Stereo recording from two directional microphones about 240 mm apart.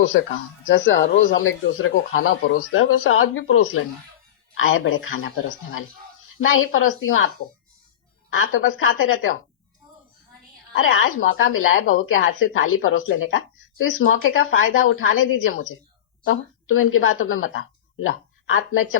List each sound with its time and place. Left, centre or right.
0.7 s speech: left
1.0 s speech: left
1.3 s a woman's voice: left
8.3 s speech: left
10.8 s a woman's voice: left